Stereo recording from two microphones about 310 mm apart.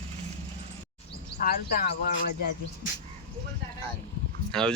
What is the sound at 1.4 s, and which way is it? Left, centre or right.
Speech, left.